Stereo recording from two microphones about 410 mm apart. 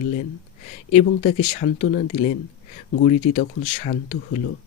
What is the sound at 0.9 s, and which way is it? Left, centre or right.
Speech, centre.